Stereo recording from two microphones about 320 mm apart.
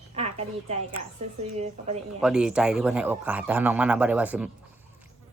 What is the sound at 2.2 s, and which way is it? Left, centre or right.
A man's voice, centre.